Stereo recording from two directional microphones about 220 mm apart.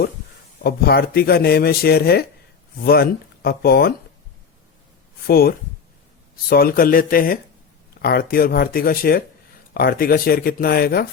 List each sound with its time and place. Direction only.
0.6 s speech: 45° left (ahead or behind)
5.2 s speech: 45° left (ahead or behind)